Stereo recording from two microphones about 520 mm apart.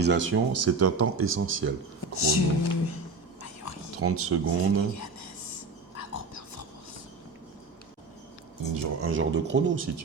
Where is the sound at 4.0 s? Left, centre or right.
Right.